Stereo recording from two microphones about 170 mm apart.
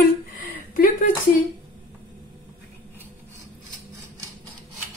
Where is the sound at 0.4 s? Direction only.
55° left (ahead or behind).